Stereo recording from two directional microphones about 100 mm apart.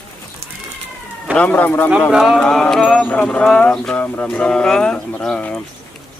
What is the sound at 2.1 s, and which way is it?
Speech, centre (ahead or behind).